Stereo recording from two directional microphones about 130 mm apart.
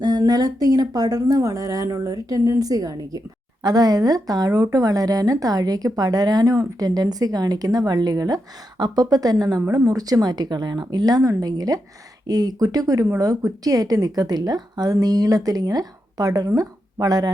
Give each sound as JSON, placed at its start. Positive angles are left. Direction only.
{"t": 0.0, "sound": "speech", "side_deg": -30}